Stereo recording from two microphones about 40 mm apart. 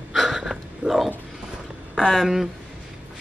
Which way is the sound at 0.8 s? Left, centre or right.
Right.